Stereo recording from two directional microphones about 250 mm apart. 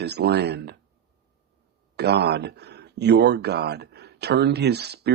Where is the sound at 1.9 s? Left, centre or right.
Right.